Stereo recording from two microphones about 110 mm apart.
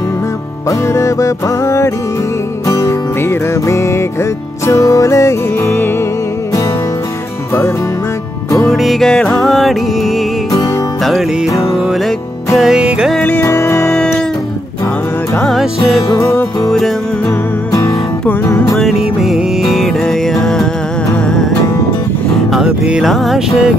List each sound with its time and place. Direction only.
0.7 s music: 30° left (ahead or behind)
8.5 s music: 25° left (ahead or behind)
8.7 s music: centre (ahead or behind)
12.5 s music: 5° right (ahead or behind)
13.2 s music: 20° left (ahead or behind)
13.8 s music: 5° left (ahead or behind)
16.6 s music: 5° left (ahead or behind)
18.4 s music: 25° left (ahead or behind)
19.2 s music: centre (ahead or behind)
22.5 s music: 5° right (ahead or behind)